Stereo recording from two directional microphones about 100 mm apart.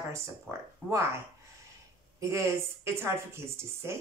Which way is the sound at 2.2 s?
30° right (ahead or behind).